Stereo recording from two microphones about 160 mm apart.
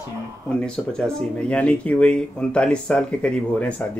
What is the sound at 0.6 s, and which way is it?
Speech, 5° left (ahead or behind).